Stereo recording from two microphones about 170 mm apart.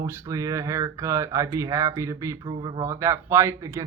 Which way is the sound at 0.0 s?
15° right (ahead or behind).